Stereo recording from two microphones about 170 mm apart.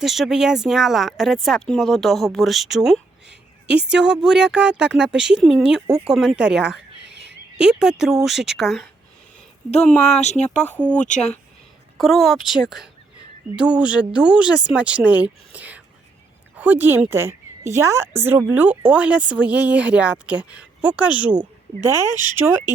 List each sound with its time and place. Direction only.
0.0 s speech: centre (ahead or behind)
10.2 s speech: 40° left (ahead or behind)
11.9 s a woman's voice: centre (ahead or behind); by 22.1 s 15° right (ahead or behind)